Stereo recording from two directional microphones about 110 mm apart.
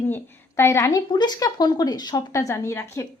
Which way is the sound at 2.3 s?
25° left (ahead or behind).